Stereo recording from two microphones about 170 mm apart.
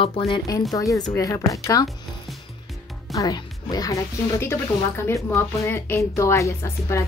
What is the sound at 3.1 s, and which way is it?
Speech, 20° left (ahead or behind).